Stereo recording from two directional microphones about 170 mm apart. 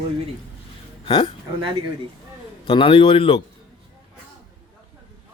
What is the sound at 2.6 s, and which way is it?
Speech, 30° left (ahead or behind).